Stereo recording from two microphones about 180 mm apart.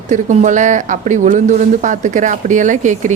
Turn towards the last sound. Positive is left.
turn(degrees=-45)  # may be behind; listen again after turning